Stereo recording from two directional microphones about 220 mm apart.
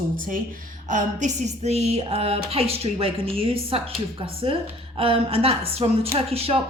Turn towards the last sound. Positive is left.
turn(degrees=-25)  # may be behind; listen again after turning